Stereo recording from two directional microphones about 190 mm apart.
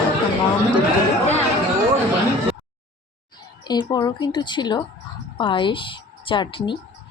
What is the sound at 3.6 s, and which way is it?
Speech, 20° left (ahead or behind).